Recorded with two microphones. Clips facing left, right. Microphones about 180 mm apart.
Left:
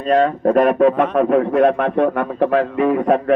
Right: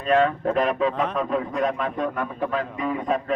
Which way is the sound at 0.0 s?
35° left (ahead or behind).